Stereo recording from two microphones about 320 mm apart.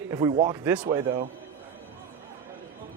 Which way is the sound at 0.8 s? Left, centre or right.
Centre.